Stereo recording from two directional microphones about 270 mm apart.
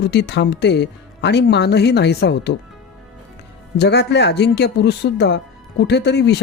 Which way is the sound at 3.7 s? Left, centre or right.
Left.